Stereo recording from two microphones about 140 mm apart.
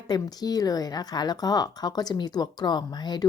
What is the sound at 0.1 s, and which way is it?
A woman's voice, 30° left (ahead or behind).